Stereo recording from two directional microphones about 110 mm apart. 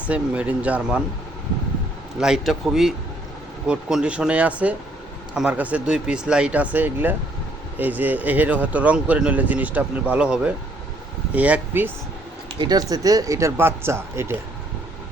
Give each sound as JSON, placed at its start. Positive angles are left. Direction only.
{"t": 0.1, "sound": "speech", "side_deg": -10}
{"t": 2.2, "sound": "a man's voice", "side_deg": -5}
{"t": 12.5, "sound": "speech", "side_deg": -40}